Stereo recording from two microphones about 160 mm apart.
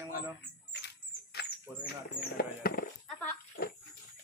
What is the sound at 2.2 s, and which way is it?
Speech, 75° left (ahead or behind).